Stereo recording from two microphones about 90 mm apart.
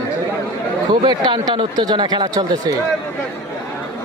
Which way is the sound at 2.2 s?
40° right (ahead or behind).